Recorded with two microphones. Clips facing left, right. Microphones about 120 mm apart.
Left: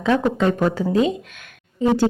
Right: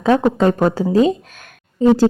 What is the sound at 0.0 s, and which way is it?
A woman's voice, 40° right (ahead or behind).